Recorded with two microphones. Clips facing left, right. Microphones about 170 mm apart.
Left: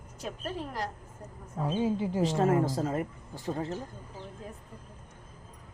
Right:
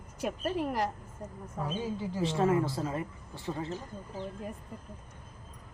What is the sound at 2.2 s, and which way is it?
Speech, 40° left (ahead or behind).